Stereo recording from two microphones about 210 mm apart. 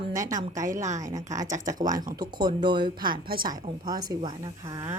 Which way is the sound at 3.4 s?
20° right (ahead or behind).